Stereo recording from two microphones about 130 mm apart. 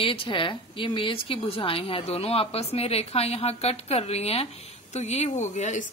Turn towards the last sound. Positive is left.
turn(degrees=70)  # may be behind; listen again after turning